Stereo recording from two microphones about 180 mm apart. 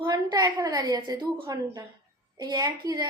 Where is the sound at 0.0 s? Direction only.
20° right (ahead or behind).